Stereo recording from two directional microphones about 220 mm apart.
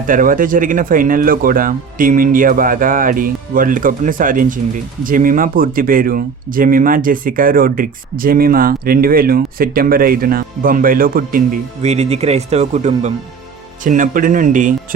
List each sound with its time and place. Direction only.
0.1 s speech: 40° right (ahead or behind)